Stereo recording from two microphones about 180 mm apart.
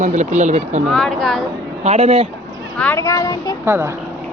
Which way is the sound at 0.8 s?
Centre (ahead or behind).